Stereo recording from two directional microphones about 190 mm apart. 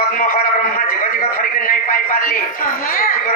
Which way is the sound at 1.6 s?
45° left (ahead or behind).